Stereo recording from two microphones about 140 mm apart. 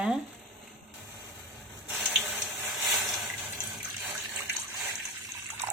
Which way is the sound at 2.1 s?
5° right (ahead or behind).